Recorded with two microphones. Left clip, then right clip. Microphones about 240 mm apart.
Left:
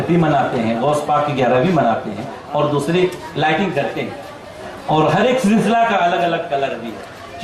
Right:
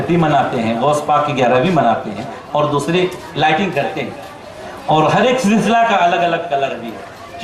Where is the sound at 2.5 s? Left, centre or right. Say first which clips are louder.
Right 2 dB; left.